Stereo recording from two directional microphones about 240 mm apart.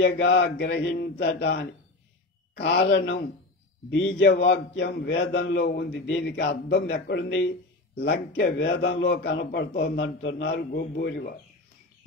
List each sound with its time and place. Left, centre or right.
0.0 s a man's voice: left